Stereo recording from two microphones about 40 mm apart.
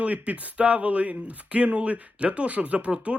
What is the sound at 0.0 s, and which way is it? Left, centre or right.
Speech, right.